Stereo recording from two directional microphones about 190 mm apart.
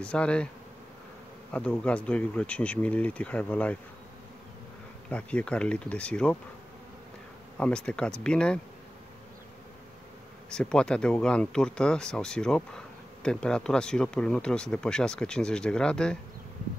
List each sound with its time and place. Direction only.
0.0 s speech: 5° left (ahead or behind)
1.5 s speech: 5° left (ahead or behind)
5.1 s speech: 5° left (ahead or behind)
7.5 s speech: 5° left (ahead or behind)
10.5 s speech: 5° left (ahead or behind)